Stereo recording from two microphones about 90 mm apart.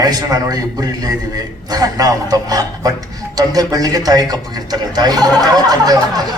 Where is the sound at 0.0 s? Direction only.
45° right (ahead or behind).